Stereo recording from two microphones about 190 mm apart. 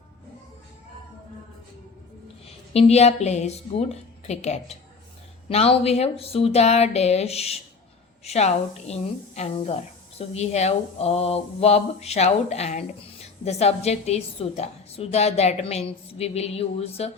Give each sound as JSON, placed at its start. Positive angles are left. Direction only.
{"t": 2.7, "sound": "a woman's voice", "side_deg": 35}